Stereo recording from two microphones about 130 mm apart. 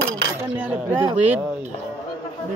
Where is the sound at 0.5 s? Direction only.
10° right (ahead or behind).